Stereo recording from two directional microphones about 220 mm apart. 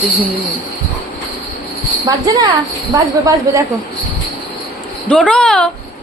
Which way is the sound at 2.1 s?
20° right (ahead or behind).